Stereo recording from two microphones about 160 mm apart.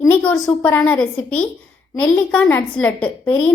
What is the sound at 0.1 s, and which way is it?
A woman's voice, 10° left (ahead or behind).